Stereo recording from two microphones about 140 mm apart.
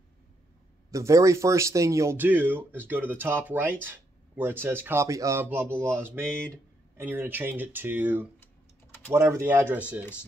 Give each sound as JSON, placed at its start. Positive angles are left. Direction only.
{"t": 0.9, "sound": "speech", "side_deg": -20}
{"t": 6.2, "sound": "speech", "side_deg": 5}
{"t": 7.0, "sound": "speech", "side_deg": -15}